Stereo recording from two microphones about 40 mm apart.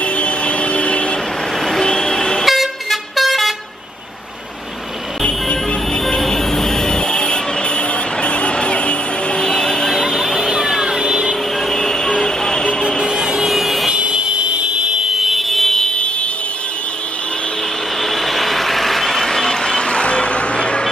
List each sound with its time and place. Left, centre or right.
0.0 s vehicle: left
1.6 s vehicle: centre
2.4 s vehicle: centre
5.2 s music: left
6.0 s vehicle: centre
9.9 s a sound: centre
10.5 s vehicle: centre
11.5 s vehicle: centre
13.0 s vehicle: centre
13.8 s vehicle: right
15.1 s fire alarm: centre
15.9 s a sound: left
18.0 s vehicle: centre; by 20.8 s left